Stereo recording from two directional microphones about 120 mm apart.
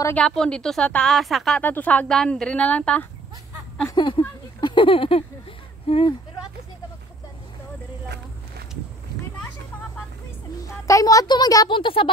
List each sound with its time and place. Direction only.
0.1 s a woman's voice: 5° left (ahead or behind)
1.6 s speech: 15° left (ahead or behind)
3.9 s speech: 40° left (ahead or behind)
10.6 s a woman's voice: 25° left (ahead or behind); by 12.1 s 45° left (ahead or behind)